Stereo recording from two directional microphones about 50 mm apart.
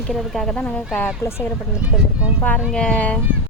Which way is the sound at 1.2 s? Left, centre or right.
Left.